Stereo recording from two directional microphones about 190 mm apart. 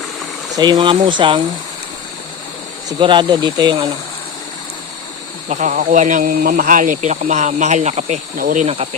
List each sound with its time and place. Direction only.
0.5 s speech: 20° right (ahead or behind)
3.0 s speech: 25° right (ahead or behind)
5.5 s speech: 40° right (ahead or behind)
8.6 s speech: 30° right (ahead or behind)